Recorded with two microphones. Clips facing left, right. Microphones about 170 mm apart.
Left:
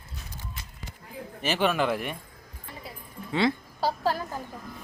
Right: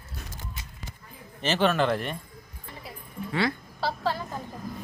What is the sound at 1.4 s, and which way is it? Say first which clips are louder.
Speech: right 2 dB; 10° left (ahead or behind).